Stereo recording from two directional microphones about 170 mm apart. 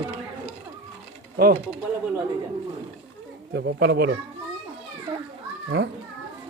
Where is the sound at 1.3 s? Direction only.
60° right (ahead or behind).